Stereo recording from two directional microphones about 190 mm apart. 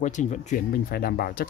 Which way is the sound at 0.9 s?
50° left (ahead or behind).